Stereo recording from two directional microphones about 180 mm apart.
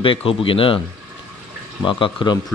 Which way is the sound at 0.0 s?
30° left (ahead or behind).